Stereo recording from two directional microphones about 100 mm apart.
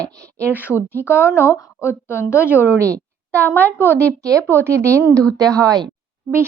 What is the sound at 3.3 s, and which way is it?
Speech, 20° left (ahead or behind).